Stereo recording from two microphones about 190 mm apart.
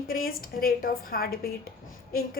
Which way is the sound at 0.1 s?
50° left (ahead or behind).